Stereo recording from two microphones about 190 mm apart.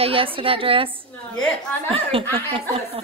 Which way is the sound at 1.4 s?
Centre (ahead or behind).